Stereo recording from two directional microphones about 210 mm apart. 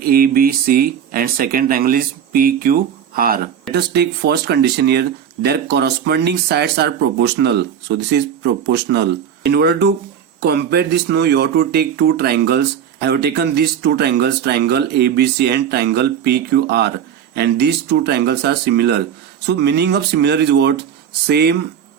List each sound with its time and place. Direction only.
0.0 s speech: 45° right (ahead or behind)